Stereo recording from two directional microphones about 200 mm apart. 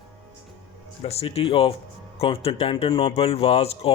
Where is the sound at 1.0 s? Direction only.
30° left (ahead or behind).